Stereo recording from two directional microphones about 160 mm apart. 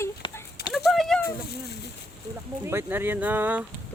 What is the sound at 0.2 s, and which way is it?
Clip-clop, 25° left (ahead or behind).